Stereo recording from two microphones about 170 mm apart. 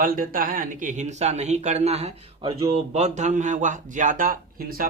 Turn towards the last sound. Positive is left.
turn(degrees=-60)  # may be behind; listen again after turning